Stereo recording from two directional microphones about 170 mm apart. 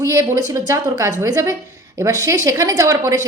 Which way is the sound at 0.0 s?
20° right (ahead or behind).